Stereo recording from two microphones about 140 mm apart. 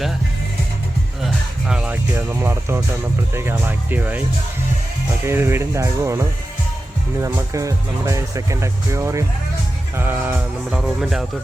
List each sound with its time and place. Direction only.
1.2 s music: 5° right (ahead or behind)
2.1 s speech: 20° right (ahead or behind)
5.2 s speech: 20° right (ahead or behind)
7.3 s speech: 20° right (ahead or behind); by 11.3 s 5° right (ahead or behind)